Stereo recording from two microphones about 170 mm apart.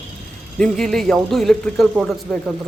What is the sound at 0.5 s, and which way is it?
Speech, 5° left (ahead or behind).